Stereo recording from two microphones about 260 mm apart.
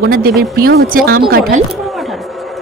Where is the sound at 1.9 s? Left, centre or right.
Centre.